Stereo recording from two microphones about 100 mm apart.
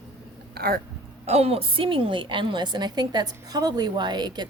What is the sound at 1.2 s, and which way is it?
A woman's voice, 90° right.